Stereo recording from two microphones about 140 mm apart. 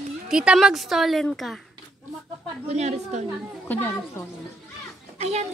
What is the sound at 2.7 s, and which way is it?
Speech, 55° right (ahead or behind).